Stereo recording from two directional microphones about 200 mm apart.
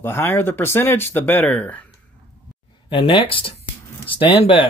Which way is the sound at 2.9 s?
25° left (ahead or behind).